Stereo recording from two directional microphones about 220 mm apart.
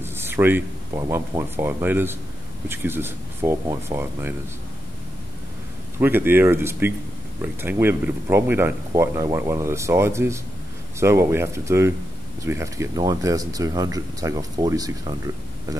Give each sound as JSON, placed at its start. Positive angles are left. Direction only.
{"t": 0.0, "sound": "speech", "side_deg": -10}
{"t": 5.9, "sound": "speech", "side_deg": -10}